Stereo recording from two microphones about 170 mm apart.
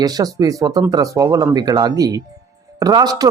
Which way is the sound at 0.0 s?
20° right (ahead or behind).